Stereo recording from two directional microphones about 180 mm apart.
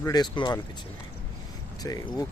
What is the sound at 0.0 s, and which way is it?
Speech, 20° left (ahead or behind).